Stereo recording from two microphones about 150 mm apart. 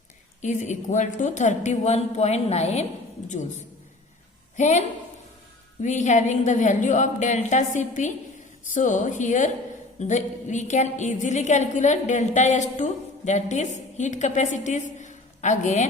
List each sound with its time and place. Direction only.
0.4 s a woman's voice: 55° left (ahead or behind)
4.5 s a woman's voice: 50° left (ahead or behind)
5.8 s a woman's voice: 50° left (ahead or behind)